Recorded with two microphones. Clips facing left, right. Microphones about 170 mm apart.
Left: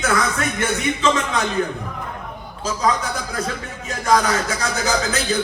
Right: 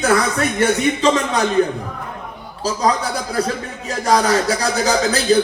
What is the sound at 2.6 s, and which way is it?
Music, 35° right (ahead or behind).